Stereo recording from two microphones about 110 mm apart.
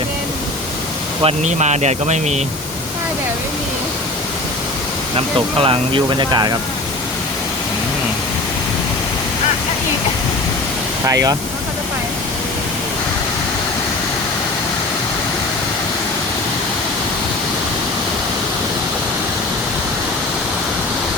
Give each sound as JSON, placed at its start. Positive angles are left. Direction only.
{"t": 1.2, "sound": "speech", "side_deg": -80}
{"t": 5.1, "sound": "speech", "side_deg": -55}
{"t": 11.0, "sound": "speech", "side_deg": -30}